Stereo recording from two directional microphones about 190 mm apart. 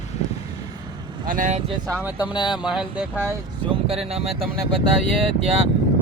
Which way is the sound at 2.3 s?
25° left (ahead or behind).